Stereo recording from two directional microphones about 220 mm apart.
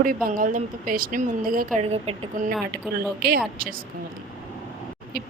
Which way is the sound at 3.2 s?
45° right (ahead or behind).